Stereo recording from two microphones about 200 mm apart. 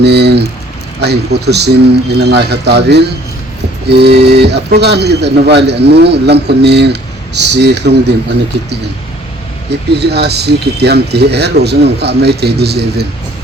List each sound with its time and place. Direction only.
0.0 s a sound: 55° right (ahead or behind)
1.0 s speech: 55° right (ahead or behind)
9.9 s speech: 55° right (ahead or behind)